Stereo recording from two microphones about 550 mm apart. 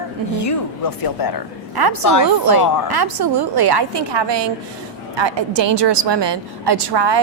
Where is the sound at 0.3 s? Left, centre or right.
Left.